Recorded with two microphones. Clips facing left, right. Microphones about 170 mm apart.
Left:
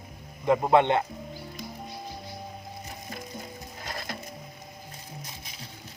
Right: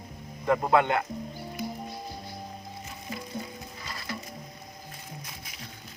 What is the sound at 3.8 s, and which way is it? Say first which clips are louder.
Music: left 2 dB; 50° left (ahead or behind).